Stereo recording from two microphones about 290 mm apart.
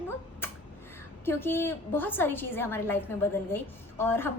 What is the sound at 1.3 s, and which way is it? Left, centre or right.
A woman's voice, centre.